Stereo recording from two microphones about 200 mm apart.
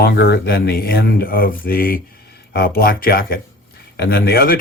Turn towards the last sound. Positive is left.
turn(degrees=50)  # may be behind; listen again after turning